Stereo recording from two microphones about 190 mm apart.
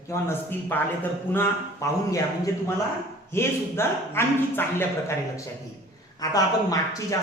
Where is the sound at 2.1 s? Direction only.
15° left (ahead or behind).